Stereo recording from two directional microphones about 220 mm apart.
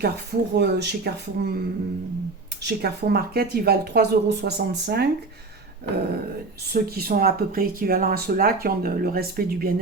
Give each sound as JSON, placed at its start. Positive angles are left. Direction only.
{"t": 0.0, "sound": "speech", "side_deg": -50}
{"t": 2.6, "sound": "speech", "side_deg": -45}
{"t": 6.7, "sound": "speech", "side_deg": -40}